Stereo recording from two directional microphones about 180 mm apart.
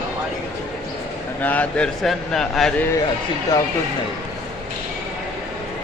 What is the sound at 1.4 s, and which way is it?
Speech, 10° left (ahead or behind).